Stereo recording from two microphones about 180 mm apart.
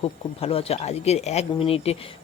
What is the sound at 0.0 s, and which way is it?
Speech, 30° left (ahead or behind).